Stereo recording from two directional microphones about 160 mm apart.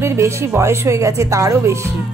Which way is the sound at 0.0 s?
15° right (ahead or behind).